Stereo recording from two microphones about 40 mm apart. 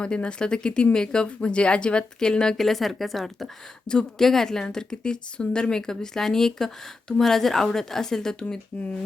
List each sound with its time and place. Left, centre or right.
0.0 s speech: left
2.6 s a woman's voice: centre
3.8 s a woman's voice: centre